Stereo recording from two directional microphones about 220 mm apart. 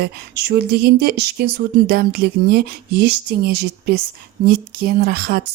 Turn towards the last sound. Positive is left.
turn(degrees=-45)  # may be behind; listen again after turning